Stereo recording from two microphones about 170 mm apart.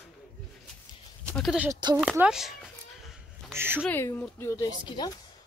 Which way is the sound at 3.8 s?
10° left (ahead or behind).